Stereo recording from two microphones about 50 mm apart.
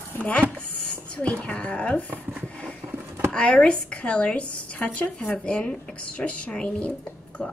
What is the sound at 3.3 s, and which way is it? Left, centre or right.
A woman's voice, left.